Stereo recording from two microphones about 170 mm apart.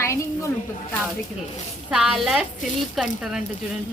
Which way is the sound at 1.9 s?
Centre (ahead or behind).